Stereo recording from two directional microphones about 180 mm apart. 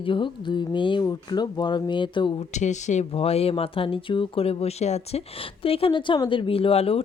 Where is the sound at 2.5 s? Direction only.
40° left (ahead or behind).